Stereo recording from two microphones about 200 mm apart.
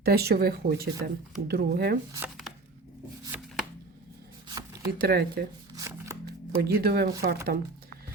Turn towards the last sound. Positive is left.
turn(degrees=-50)  # may be behind; listen again after turning